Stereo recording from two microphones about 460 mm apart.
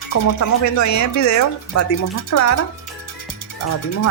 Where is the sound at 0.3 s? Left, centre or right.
Left.